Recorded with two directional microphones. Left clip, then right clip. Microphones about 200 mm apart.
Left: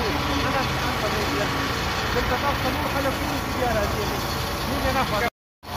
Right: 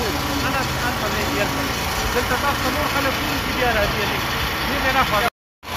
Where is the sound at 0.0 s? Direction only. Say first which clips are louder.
Right 2 dB; 55° right (ahead or behind).